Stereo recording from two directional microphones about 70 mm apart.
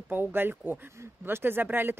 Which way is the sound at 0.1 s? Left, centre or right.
Right.